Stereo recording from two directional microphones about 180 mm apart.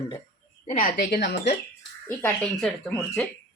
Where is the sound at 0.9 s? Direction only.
65° left (ahead or behind).